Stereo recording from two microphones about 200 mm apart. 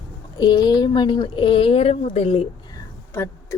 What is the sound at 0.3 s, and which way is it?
Speech, 20° left (ahead or behind).